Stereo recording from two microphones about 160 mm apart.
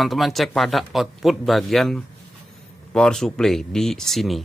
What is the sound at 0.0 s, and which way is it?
Speech, centre (ahead or behind).